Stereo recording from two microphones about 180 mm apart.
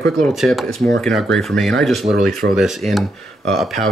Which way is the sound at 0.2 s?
Centre (ahead or behind).